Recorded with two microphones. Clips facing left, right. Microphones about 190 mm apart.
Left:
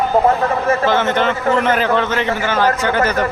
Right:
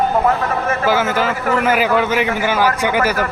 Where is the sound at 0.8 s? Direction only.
5° right (ahead or behind).